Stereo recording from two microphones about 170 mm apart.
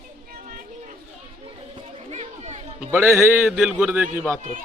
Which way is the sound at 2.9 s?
10° right (ahead or behind).